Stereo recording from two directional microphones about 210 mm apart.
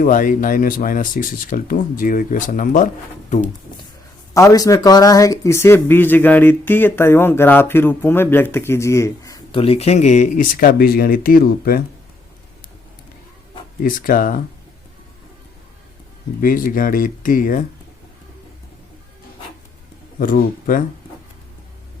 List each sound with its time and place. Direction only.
0.0 s speech: 40° left (ahead or behind)
4.4 s speech: 15° left (ahead or behind)
9.6 s speech: 30° left (ahead or behind); by 11.8 s 45° left (ahead or behind)
13.8 s speech: 40° left (ahead or behind)
16.4 s speech: 40° left (ahead or behind)
20.1 s speech: 40° left (ahead or behind)